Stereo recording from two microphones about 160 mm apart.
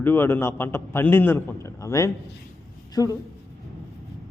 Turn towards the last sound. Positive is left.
turn(degrees=25)  # may be behind; listen again after turning